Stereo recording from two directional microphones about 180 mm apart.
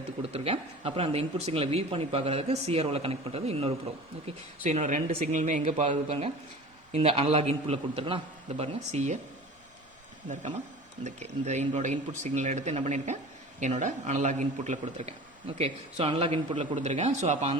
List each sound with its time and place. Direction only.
0.2 s a man's voice: 35° right (ahead or behind)
11.0 s a man's voice: 40° right (ahead or behind)